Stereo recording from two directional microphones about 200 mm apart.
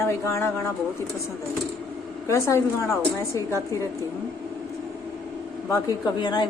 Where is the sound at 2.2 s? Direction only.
15° left (ahead or behind).